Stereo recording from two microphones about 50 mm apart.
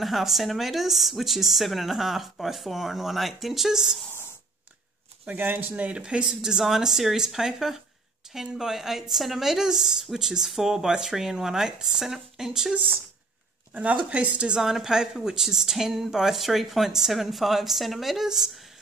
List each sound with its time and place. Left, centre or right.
0.0 s a woman's voice: centre
5.2 s speech: right; by 6.3 s centre
6.4 s speech: centre
13.7 s speech: right
14.6 s a woman's voice: centre